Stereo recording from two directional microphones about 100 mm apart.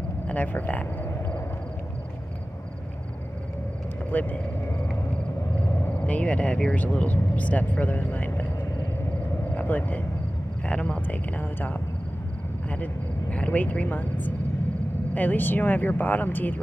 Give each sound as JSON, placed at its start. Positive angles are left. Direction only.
{"t": 0.3, "sound": "speech", "side_deg": 15}
{"t": 4.1, "sound": "speech", "side_deg": 15}
{"t": 5.9, "sound": "speech", "side_deg": 15}
{"t": 9.6, "sound": "speech", "side_deg": 15}